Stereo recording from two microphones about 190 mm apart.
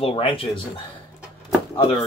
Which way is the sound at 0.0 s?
30° left (ahead or behind).